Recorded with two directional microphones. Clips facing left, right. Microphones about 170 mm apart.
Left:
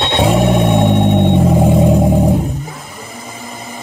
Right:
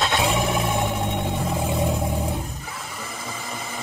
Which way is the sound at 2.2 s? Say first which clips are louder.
Left 14 dB; 40° left (ahead or behind).